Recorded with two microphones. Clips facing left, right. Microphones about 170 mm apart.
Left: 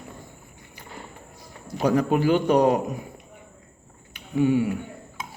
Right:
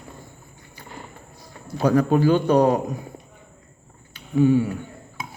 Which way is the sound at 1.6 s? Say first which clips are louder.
Right 2 dB; 20° left (ahead or behind).